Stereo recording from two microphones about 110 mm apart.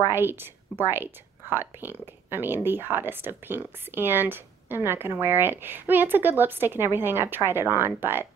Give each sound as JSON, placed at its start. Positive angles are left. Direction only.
{"t": 0.0, "sound": "a woman's voice", "side_deg": -20}